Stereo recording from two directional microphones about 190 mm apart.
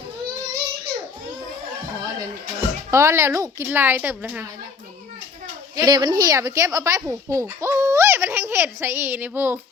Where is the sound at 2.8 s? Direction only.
15° right (ahead or behind).